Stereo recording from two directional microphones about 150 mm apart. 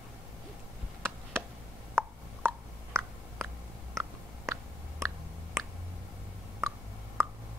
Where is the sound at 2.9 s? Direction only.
5° left (ahead or behind).